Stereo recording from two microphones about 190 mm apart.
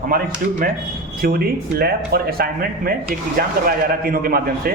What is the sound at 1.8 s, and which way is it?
A man's voice, 55° right (ahead or behind).